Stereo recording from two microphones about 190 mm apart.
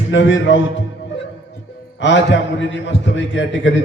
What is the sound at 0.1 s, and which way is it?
Speech, 80° left.